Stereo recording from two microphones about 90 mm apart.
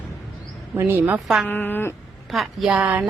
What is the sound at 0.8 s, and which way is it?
Speech, 25° right (ahead or behind).